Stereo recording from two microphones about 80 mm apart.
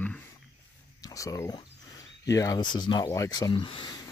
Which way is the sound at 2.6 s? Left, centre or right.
Left.